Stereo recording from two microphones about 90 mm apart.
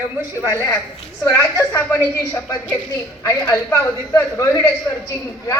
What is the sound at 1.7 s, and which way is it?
Speech, 20° left (ahead or behind).